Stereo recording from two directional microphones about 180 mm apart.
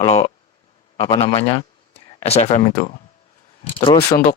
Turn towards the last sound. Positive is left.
turn(degrees=30)  # may be behind; listen again after turning